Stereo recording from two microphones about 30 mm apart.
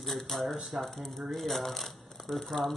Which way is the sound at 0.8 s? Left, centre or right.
Centre.